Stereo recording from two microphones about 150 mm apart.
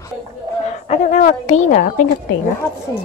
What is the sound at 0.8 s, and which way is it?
A woman's voice, 50° left (ahead or behind).